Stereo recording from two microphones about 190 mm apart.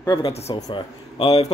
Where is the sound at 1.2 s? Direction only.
30° left (ahead or behind).